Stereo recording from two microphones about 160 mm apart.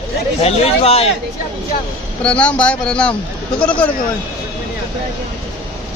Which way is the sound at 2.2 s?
5° left (ahead or behind).